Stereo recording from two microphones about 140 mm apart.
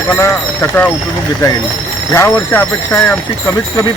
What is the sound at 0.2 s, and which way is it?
Speech, 15° left (ahead or behind).